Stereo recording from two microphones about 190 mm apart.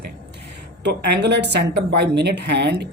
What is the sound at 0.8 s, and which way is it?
A woman's voice, 65° right (ahead or behind).